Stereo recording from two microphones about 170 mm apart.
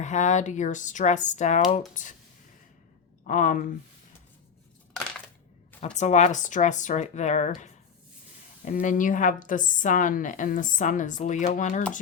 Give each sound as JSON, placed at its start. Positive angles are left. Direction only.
{"t": 0.0, "sound": "speech", "side_deg": 45}
{"t": 3.2, "sound": "speech", "side_deg": 50}
{"t": 5.8, "sound": "speech", "side_deg": 40}